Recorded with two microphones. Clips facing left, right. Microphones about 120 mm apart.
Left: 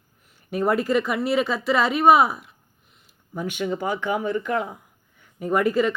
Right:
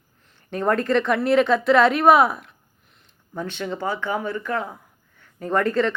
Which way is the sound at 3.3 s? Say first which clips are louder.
Left 2 dB; 15° left (ahead or behind).